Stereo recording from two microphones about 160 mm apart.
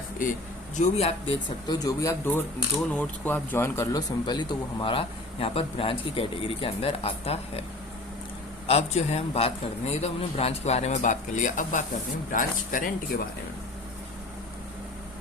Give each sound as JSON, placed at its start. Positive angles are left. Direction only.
{"t": 0.8, "sound": "speech", "side_deg": 40}
{"t": 8.6, "sound": "a man's voice", "side_deg": 40}